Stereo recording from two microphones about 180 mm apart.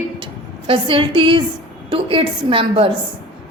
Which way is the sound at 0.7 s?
30° right (ahead or behind).